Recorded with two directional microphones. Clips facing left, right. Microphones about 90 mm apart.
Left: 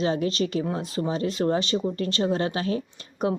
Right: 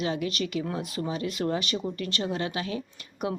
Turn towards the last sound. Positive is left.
turn(degrees=35)  # may be behind; listen again after turning